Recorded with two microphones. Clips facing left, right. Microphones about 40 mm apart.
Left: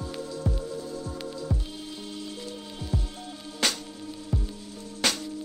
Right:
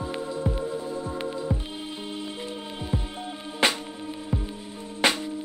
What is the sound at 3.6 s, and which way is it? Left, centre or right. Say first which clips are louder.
Music: right 5 dB; right.